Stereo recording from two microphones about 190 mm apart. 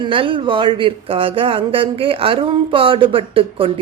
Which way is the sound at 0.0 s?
25° right (ahead or behind).